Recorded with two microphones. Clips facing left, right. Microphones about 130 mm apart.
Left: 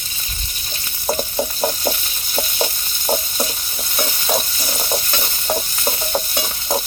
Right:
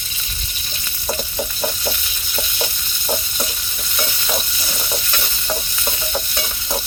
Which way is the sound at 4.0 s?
35° left (ahead or behind).